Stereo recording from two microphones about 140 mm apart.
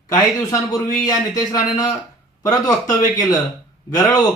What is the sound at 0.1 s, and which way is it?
Speech, 25° left (ahead or behind).